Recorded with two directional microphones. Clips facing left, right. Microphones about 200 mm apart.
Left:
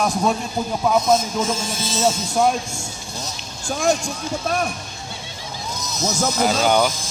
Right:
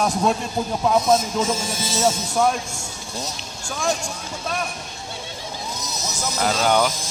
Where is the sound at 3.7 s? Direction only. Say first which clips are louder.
Left 5 dB; 40° left (ahead or behind).